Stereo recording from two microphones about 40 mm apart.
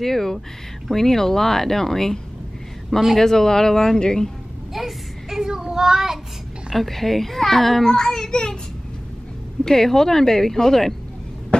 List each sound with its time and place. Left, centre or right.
0.0 s a child's voice: centre
3.2 s a child's voice: centre
4.7 s child singing: centre
6.7 s a child's voice: centre; by 8.5 s left
9.7 s a child's voice: centre